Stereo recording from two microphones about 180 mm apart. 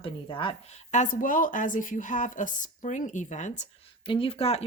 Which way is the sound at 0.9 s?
45° left (ahead or behind).